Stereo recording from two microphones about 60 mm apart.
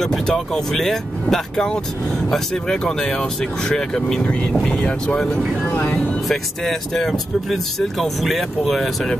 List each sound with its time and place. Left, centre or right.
0.0 s speech: centre
4.6 s speech: left
5.2 s speech: centre